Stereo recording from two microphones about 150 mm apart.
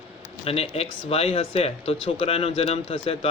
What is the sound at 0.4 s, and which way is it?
Speech, 40° left (ahead or behind).